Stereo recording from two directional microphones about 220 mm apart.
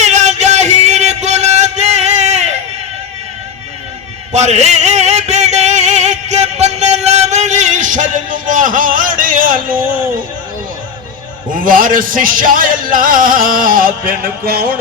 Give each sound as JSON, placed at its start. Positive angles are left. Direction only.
{"t": 0.0, "sound": "music", "side_deg": -30}
{"t": 4.3, "sound": "music", "side_deg": -30}
{"t": 11.5, "sound": "music", "side_deg": -40}